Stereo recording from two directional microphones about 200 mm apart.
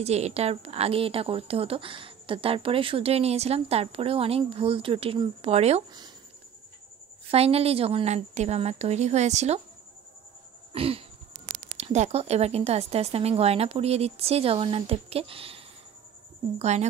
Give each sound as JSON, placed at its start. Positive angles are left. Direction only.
{"t": 0.0, "sound": "a woman's voice", "side_deg": -35}
{"t": 7.2, "sound": "speech", "side_deg": -30}
{"t": 10.7, "sound": "throat clearing", "side_deg": -30}
{"t": 11.7, "sound": "speech", "side_deg": -35}